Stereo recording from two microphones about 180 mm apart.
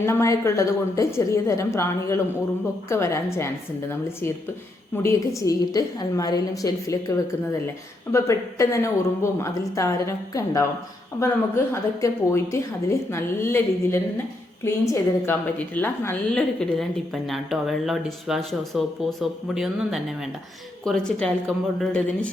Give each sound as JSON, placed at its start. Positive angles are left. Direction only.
{"t": 0.0, "sound": "speech", "side_deg": 15}
{"t": 5.0, "sound": "a woman's voice", "side_deg": 15}